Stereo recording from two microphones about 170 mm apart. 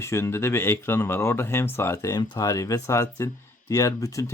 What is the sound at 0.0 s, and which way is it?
Speech, 15° left (ahead or behind).